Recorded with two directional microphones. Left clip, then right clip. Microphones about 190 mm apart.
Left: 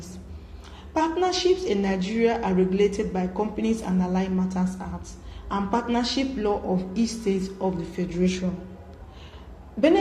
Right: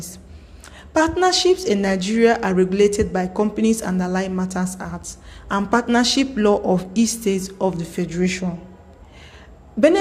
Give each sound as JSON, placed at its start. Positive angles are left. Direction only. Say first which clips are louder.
{"t": 0.9, "sound": "a woman's voice", "louder": "right 7 dB", "side_deg": -50}